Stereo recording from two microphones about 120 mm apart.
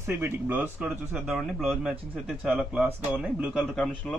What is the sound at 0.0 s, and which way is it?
Speech, 15° right (ahead or behind).